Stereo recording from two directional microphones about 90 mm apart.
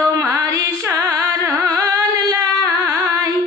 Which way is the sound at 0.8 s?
20° right (ahead or behind).